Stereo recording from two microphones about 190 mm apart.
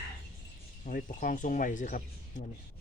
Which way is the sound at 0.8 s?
45° left (ahead or behind).